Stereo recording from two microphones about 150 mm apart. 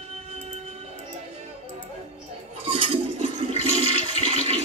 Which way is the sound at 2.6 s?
35° right (ahead or behind).